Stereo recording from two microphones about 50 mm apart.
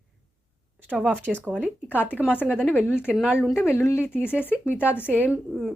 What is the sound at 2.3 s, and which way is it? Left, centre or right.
Speech, left.